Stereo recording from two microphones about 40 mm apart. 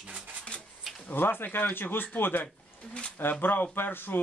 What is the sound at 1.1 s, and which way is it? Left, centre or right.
Speech, left.